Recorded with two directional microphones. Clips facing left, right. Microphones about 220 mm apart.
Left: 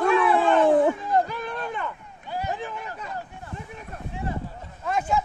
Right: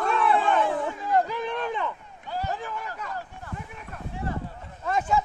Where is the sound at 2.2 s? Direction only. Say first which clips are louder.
Left 1 dB; 15° left (ahead or behind).